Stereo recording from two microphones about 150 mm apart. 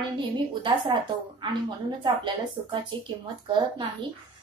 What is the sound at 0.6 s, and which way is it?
Speech, 30° right (ahead or behind).